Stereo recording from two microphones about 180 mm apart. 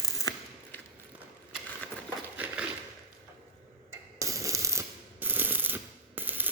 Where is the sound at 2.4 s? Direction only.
10° right (ahead or behind).